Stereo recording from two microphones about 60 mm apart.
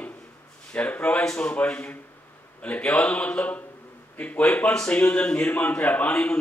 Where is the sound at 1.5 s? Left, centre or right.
Left.